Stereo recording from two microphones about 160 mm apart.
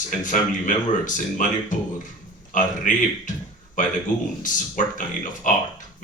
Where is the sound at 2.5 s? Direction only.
55° left (ahead or behind).